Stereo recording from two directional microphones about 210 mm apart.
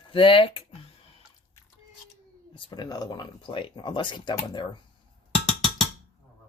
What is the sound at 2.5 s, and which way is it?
Speech, 20° left (ahead or behind).